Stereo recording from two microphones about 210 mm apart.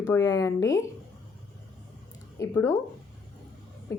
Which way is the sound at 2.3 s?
15° left (ahead or behind).